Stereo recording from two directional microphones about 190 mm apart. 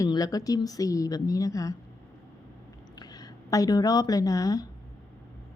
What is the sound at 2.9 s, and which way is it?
A woman's voice, 20° left (ahead or behind).